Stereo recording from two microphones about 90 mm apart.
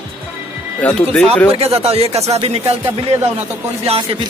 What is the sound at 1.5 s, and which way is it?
Speech, 90° right.